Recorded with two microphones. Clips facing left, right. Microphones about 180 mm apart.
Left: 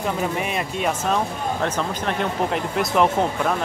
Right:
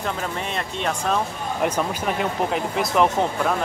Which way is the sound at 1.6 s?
10° right (ahead or behind).